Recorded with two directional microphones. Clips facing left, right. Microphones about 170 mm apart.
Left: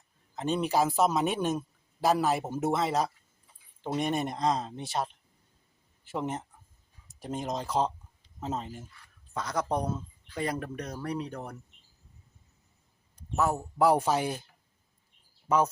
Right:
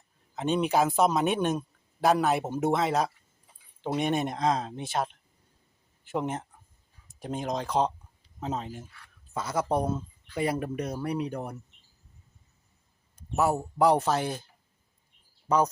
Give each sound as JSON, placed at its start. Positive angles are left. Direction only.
{"t": 0.3, "sound": "speech", "side_deg": 0}
{"t": 6.1, "sound": "speech", "side_deg": 0}
{"t": 13.1, "sound": "speech", "side_deg": -10}
{"t": 13.7, "sound": "speech", "side_deg": 5}
{"t": 15.4, "sound": "speech", "side_deg": 5}